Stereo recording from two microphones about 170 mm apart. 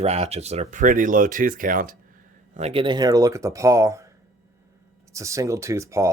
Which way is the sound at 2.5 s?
35° right (ahead or behind).